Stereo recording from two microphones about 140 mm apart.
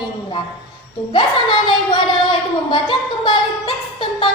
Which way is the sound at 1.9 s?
40° left (ahead or behind).